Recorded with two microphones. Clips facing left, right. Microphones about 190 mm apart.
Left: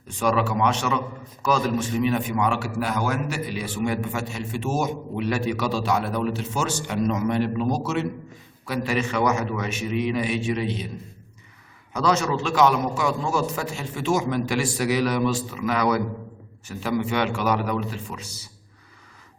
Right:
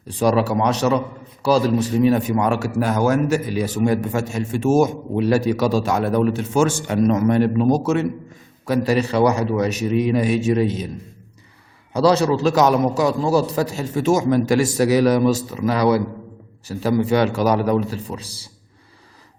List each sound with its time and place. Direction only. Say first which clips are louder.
0.1 s a man's voice: right 5 dB; 35° right (ahead or behind)
11.9 s a man's voice: right 7 dB; 35° right (ahead or behind)